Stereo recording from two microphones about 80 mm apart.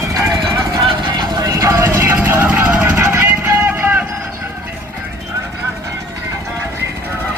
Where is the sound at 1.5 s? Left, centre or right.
Right.